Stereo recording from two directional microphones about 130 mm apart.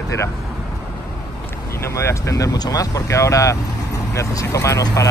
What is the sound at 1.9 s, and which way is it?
Speech, 20° left (ahead or behind).